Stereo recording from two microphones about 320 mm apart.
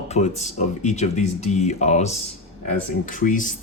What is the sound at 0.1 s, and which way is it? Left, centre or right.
Speech, left.